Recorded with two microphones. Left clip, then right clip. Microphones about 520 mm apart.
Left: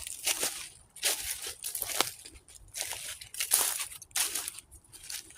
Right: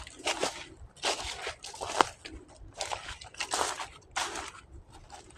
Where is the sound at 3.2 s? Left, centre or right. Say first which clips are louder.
Right 1 dB; left.